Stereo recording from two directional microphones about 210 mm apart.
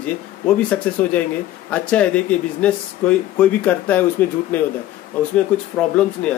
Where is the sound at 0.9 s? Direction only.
5° left (ahead or behind).